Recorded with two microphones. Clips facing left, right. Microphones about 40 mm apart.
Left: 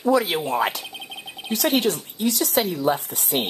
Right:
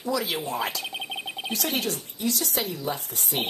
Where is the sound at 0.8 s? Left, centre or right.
Centre.